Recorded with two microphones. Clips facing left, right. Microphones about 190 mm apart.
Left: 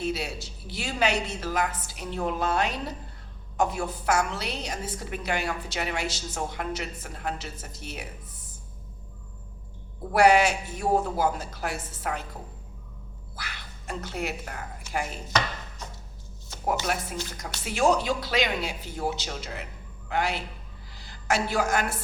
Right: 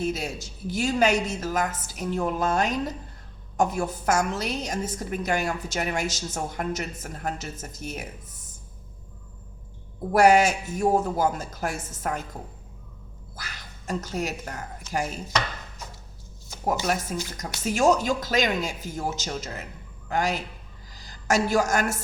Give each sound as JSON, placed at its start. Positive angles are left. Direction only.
{"t": 0.0, "sound": "a woman's voice", "side_deg": -45}
{"t": 10.1, "sound": "a woman's voice", "side_deg": -45}
{"t": 13.3, "sound": "speech", "side_deg": -40}
{"t": 16.6, "sound": "a woman's voice", "side_deg": -45}